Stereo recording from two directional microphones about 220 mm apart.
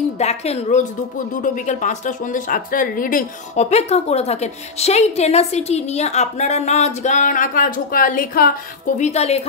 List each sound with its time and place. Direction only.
0.2 s speech: 30° left (ahead or behind)